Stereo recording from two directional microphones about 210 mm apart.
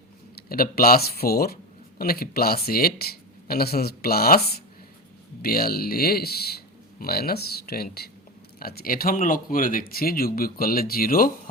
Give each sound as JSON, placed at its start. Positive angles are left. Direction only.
{"t": 0.4, "sound": "speech", "side_deg": 45}